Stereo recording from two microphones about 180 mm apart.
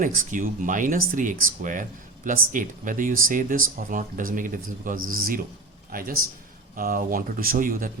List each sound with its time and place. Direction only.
0.0 s speech: 45° right (ahead or behind)